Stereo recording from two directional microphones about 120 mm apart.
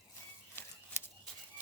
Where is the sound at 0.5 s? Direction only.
20° left (ahead or behind).